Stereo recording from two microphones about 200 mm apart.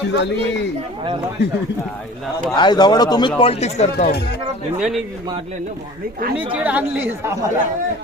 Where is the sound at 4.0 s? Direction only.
50° left (ahead or behind).